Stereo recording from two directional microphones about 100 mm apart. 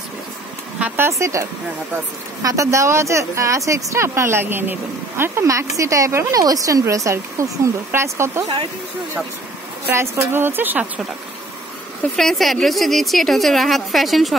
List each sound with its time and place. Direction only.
0.7 s a sound: 15° right (ahead or behind)
1.0 s speech: 30° right (ahead or behind)
9.8 s speech: 20° right (ahead or behind)
12.2 s a woman's voice: 5° left (ahead or behind)